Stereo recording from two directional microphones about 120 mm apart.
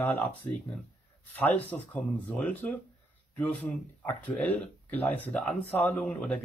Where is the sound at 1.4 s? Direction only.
15° left (ahead or behind).